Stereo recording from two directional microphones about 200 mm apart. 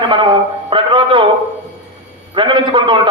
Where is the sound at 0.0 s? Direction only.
25° right (ahead or behind).